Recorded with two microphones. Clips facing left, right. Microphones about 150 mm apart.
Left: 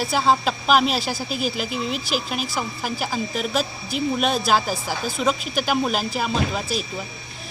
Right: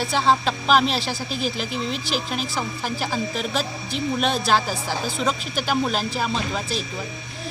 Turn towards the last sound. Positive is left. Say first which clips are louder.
# left 2 dB
turn(degrees=5)  # may be behind; listen again after turning